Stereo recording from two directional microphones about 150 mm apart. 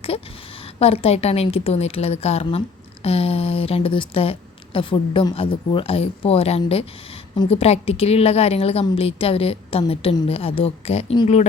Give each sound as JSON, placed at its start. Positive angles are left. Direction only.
{"t": 0.8, "sound": "a woman's voice", "side_deg": 40}